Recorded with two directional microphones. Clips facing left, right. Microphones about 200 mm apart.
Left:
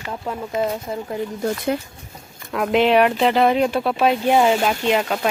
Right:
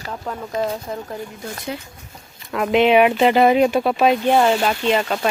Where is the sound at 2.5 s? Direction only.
Centre (ahead or behind).